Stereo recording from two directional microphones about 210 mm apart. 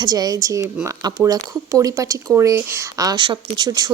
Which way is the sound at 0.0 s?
20° right (ahead or behind).